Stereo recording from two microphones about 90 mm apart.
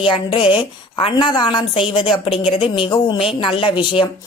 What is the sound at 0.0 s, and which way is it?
A woman's voice, 70° left (ahead or behind).